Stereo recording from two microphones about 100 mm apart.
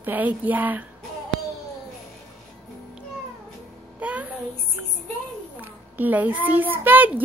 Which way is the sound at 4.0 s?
15° right (ahead or behind).